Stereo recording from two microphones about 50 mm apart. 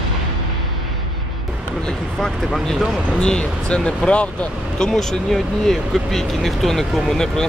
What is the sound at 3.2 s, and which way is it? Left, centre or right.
Speech, centre.